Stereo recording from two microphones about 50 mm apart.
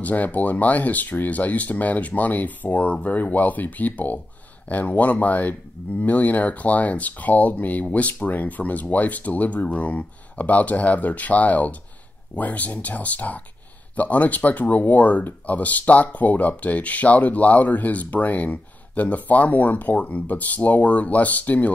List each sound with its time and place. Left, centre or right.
0.0 s speech: left